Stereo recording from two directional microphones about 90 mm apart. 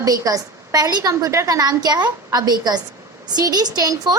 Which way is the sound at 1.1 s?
35° right (ahead or behind).